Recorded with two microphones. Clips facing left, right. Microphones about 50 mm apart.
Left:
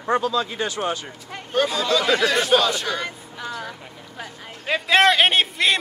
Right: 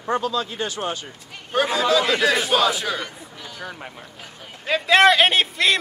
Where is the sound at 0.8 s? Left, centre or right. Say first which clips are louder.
Left 3 dB; centre.